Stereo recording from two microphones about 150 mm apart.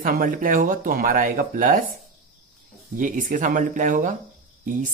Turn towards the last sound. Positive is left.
turn(degrees=-65)  # may be behind; listen again after turning